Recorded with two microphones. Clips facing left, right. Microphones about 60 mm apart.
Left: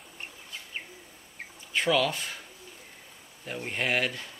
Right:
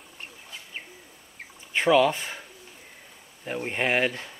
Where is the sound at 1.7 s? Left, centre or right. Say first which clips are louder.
Right 6 dB; right.